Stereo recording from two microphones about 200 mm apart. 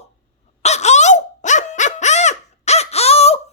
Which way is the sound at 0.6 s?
35° left (ahead or behind).